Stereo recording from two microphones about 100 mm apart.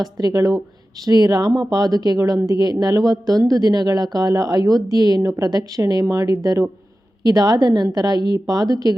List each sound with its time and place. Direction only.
0.0 s speech: 40° right (ahead or behind)